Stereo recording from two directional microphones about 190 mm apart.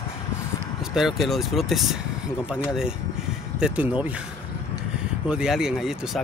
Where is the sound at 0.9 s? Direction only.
Centre (ahead or behind).